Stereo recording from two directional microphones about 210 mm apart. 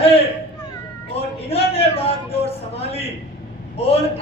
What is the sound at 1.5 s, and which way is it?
A man's voice, 30° left (ahead or behind).